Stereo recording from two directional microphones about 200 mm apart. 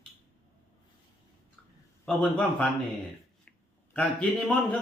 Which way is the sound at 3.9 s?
5° left (ahead or behind).